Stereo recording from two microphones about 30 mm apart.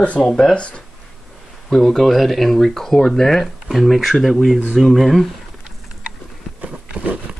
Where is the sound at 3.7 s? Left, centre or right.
Centre.